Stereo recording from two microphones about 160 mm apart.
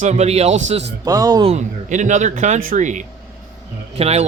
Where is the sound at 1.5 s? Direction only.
45° right (ahead or behind).